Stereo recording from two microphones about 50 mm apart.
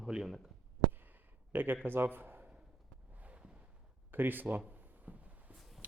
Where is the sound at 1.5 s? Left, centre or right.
Right.